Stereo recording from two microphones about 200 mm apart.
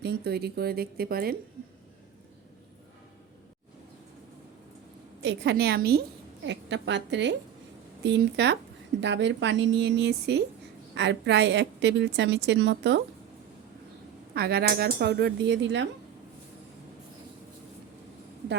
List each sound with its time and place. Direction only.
0.0 s speech: 55° right (ahead or behind)
5.2 s speech: 55° right (ahead or behind)
6.4 s a woman's voice: 60° right (ahead or behind)
14.3 s speech: 50° right (ahead or behind)